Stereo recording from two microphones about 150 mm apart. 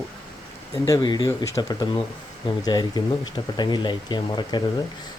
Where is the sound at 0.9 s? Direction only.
25° left (ahead or behind).